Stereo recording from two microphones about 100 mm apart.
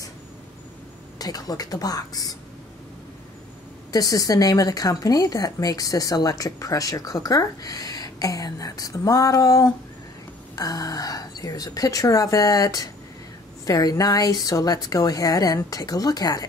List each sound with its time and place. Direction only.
1.1 s speech: 40° left (ahead or behind)
3.9 s speech: 35° left (ahead or behind)